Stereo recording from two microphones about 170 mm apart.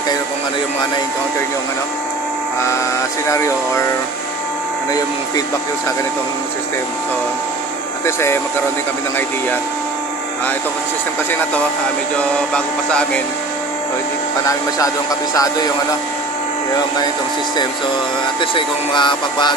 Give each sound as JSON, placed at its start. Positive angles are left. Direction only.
{"t": 3.3, "sound": "music", "side_deg": 15}
{"t": 8.0, "sound": "music", "side_deg": 15}
{"t": 12.2, "sound": "music", "side_deg": 5}
{"t": 14.8, "sound": "speech", "side_deg": 20}
{"t": 18.4, "sound": "speech", "side_deg": 30}